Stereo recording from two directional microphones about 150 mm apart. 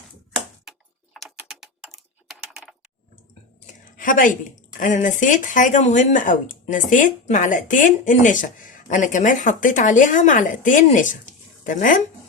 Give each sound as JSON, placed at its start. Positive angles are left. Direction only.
{"t": 1.1, "sound": "typing", "side_deg": 0}
{"t": 3.7, "sound": "a sound", "side_deg": 65}
{"t": 4.8, "sound": "speech", "side_deg": 60}